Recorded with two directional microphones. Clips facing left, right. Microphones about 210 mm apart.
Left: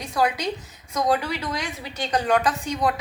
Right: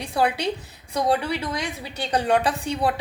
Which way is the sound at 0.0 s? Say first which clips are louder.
Right 1 dB; 30° right (ahead or behind).